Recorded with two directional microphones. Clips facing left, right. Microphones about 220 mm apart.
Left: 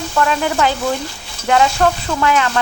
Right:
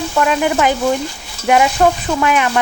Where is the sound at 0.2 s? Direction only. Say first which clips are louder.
Right 2 dB; 15° right (ahead or behind).